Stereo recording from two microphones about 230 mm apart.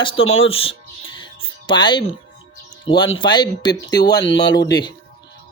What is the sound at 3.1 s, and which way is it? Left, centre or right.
Speech, centre.